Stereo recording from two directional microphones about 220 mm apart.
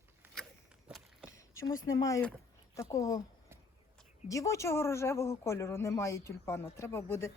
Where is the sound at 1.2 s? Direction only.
15° left (ahead or behind).